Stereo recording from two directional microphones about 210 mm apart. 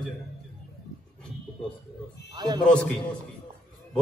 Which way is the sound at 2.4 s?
20° right (ahead or behind).